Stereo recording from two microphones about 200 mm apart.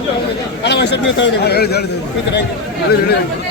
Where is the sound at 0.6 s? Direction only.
60° left (ahead or behind).